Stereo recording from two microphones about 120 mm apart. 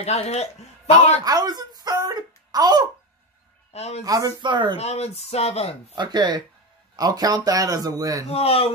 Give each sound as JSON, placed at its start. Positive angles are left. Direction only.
{"t": 0.0, "sound": "speech", "side_deg": 65}
{"t": 1.2, "sound": "a sound", "side_deg": -35}
{"t": 3.7, "sound": "speech", "side_deg": 60}
{"t": 4.0, "sound": "speech", "side_deg": -30}
{"t": 4.4, "sound": "speech", "side_deg": -40}
{"t": 4.7, "sound": "speech", "side_deg": 60}
{"t": 5.9, "sound": "speech", "side_deg": -35}
{"t": 8.3, "sound": "speech", "side_deg": 55}